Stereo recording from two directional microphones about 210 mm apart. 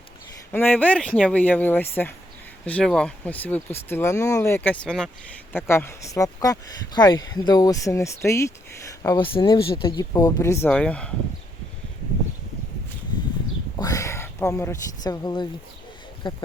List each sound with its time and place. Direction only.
0.5 s speech: 10° left (ahead or behind)
9.0 s speech: 25° left (ahead or behind); by 11.1 s 5° left (ahead or behind)
13.7 s speech: 15° left (ahead or behind)